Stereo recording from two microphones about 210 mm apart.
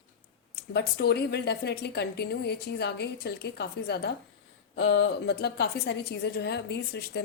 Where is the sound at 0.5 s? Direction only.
50° left (ahead or behind).